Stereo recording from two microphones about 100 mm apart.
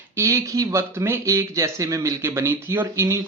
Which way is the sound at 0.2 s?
30° right (ahead or behind).